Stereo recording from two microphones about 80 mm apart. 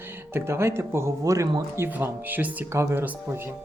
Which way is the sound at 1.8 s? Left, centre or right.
Right.